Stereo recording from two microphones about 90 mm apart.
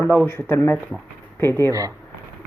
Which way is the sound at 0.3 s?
25° left (ahead or behind).